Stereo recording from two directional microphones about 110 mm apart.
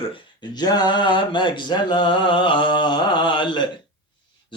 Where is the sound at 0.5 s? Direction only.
40° left (ahead or behind).